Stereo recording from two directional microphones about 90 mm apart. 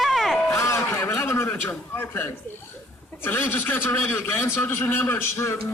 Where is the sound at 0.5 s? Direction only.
35° left (ahead or behind).